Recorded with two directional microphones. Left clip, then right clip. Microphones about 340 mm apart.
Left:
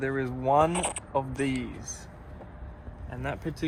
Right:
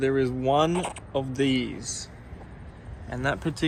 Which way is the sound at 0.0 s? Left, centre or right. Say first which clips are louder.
Right 5 dB; centre.